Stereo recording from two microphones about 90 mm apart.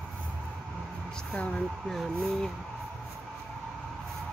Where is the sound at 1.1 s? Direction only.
10° left (ahead or behind).